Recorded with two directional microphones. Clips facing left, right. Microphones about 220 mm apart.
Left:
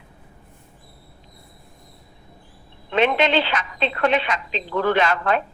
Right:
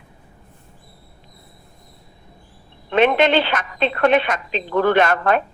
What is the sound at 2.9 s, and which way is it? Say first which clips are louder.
A man's voice: right 3 dB; 55° right (ahead or behind).